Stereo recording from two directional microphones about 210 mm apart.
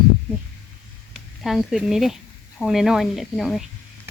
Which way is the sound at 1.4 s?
Centre (ahead or behind).